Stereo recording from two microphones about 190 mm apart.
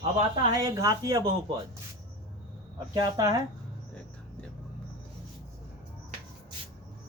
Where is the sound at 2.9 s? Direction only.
20° right (ahead or behind).